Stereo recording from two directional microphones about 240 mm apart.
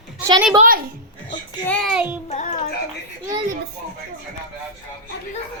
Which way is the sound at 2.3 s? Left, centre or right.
Left.